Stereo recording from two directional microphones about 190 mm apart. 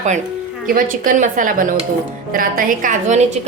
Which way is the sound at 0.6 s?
45° right (ahead or behind).